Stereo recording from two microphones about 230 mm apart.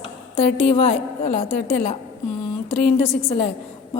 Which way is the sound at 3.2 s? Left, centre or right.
Left.